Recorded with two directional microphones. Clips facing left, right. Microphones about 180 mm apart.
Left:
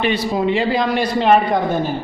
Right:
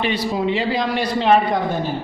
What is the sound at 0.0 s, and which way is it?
A man's voice, 55° left (ahead or behind).